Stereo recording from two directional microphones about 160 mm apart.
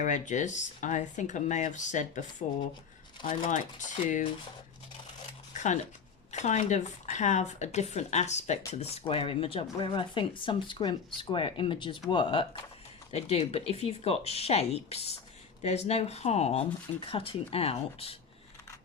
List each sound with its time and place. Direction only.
0.0 s speech: 50° left (ahead or behind)
5.5 s speech: 50° left (ahead or behind)